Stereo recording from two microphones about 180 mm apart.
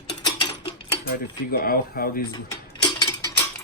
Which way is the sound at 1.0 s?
55° left (ahead or behind).